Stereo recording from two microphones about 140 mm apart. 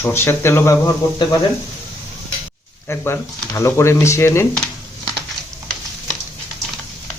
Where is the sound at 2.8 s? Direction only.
20° left (ahead or behind).